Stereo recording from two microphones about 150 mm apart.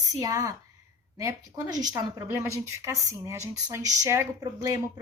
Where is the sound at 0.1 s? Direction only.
25° right (ahead or behind).